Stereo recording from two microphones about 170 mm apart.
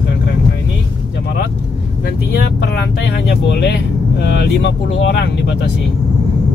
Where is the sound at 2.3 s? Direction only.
75° left (ahead or behind).